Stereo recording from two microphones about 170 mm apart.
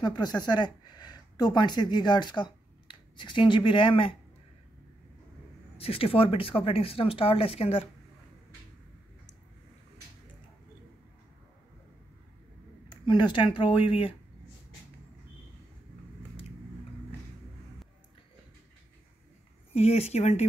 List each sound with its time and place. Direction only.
0.0 s speech: 25° left (ahead or behind)
5.8 s speech: 35° left (ahead or behind)
12.8 s speech: 25° left (ahead or behind)
19.7 s speech: 35° left (ahead or behind)